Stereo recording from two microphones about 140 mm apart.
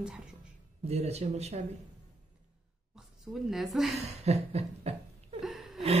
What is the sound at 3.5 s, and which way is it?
Speech, centre (ahead or behind).